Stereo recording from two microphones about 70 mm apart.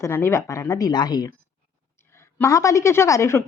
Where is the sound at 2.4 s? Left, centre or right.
Left.